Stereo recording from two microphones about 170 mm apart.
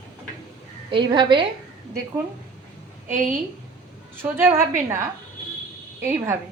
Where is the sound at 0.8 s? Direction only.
25° right (ahead or behind).